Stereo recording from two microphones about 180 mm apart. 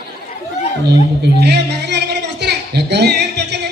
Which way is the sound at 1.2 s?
65° right (ahead or behind).